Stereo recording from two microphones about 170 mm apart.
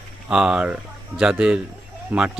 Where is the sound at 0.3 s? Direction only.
5° right (ahead or behind).